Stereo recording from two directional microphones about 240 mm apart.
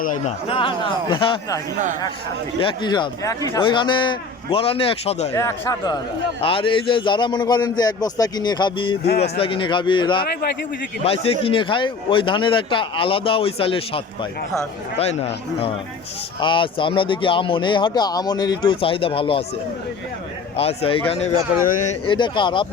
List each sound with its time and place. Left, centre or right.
0.0 s speech: left
5.3 s speech: centre
20.6 s speech: left
22.0 s speech: centre